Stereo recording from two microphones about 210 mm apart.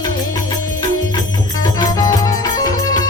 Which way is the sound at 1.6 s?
20° left (ahead or behind).